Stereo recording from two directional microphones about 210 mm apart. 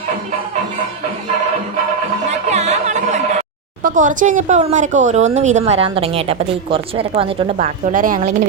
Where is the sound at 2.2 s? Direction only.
30° right (ahead or behind).